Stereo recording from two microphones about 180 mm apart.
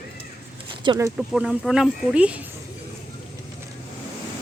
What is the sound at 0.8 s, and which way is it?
Speech, 20° right (ahead or behind).